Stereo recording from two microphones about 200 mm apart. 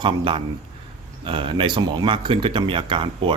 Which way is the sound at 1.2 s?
25° right (ahead or behind).